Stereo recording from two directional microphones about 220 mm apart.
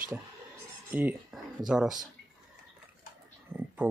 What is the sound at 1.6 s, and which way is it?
Speech, centre (ahead or behind).